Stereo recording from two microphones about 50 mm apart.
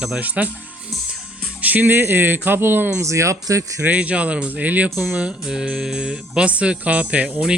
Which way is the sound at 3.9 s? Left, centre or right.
Right.